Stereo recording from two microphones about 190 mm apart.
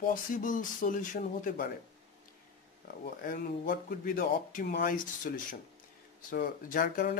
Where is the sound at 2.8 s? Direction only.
50° left (ahead or behind).